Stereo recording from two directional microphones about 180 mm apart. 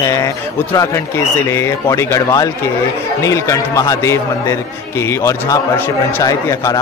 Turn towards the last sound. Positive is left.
turn(degrees=20)  # may be behind; listen again after turning